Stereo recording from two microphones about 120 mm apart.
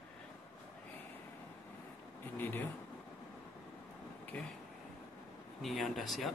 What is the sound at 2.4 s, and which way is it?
Speech, 15° left (ahead or behind).